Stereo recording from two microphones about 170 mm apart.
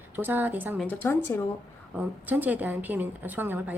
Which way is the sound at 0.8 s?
10° left (ahead or behind).